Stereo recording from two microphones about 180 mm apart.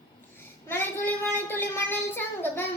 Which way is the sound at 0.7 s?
10° left (ahead or behind).